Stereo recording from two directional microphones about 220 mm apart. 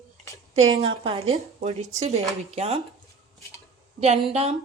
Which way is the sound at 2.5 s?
25° right (ahead or behind).